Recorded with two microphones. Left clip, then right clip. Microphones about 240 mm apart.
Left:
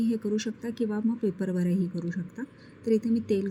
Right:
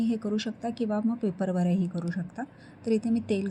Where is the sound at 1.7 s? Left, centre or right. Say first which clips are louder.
Even; centre.